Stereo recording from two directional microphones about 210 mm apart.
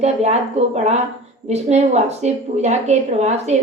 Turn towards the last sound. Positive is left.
turn(degrees=-30)  # may be behind; listen again after turning